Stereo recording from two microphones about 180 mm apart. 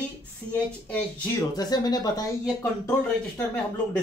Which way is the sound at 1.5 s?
20° left (ahead or behind).